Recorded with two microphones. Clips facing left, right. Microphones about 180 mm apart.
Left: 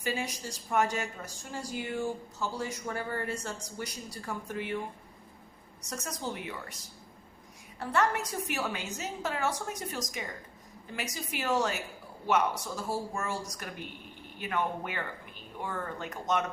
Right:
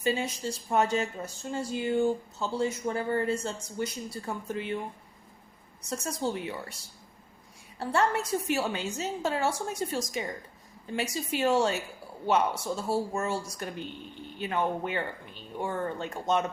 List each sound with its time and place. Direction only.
0.0 s speech: 25° right (ahead or behind)
5.8 s speech: 25° right (ahead or behind)